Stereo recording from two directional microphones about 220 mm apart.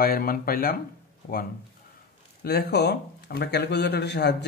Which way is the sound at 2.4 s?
45° left (ahead or behind).